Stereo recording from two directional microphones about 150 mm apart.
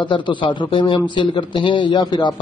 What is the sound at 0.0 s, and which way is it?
A man's voice, 30° left (ahead or behind).